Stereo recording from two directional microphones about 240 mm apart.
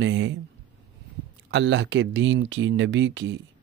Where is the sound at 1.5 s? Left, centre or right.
Right.